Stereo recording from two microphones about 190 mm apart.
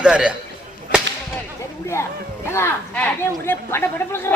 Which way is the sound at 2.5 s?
10° left (ahead or behind).